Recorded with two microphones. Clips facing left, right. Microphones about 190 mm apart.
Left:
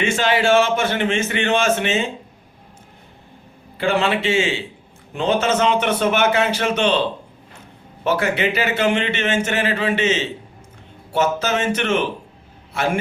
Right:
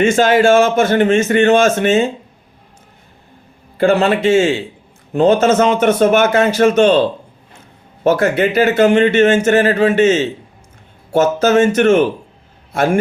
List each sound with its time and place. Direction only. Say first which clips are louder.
0.0 s a man's voice: right 8 dB; 45° right (ahead or behind)
3.8 s a man's voice: right 7 dB; 45° right (ahead or behind)
8.0 s a man's voice: right 6 dB; 45° right (ahead or behind)